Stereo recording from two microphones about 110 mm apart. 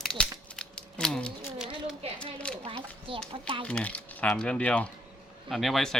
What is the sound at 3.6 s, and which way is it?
Speech, 10° left (ahead or behind).